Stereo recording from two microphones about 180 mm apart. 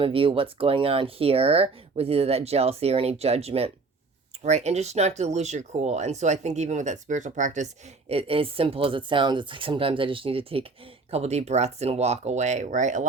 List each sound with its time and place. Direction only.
0.0 s speech: 30° right (ahead or behind)